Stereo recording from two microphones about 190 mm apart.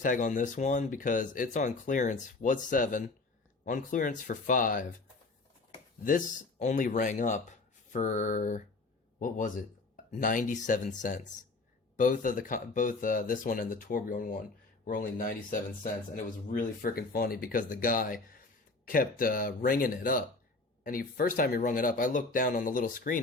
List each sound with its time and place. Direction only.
0.0 s speech: 45° left (ahead or behind)
6.1 s speech: 40° left (ahead or behind)
7.9 s mantra: 40° left (ahead or behind)
9.1 s speech: 40° left (ahead or behind)
11.0 s mantra: 40° left (ahead or behind)
11.9 s speech: 45° left (ahead or behind)